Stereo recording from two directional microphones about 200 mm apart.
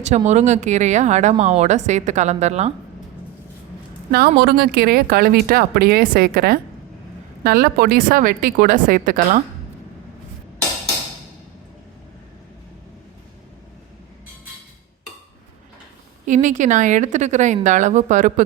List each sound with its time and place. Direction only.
0.3 s a woman's voice: 35° right (ahead or behind)
4.1 s speech: 50° right (ahead or behind)
16.2 s a woman's voice: 40° right (ahead or behind)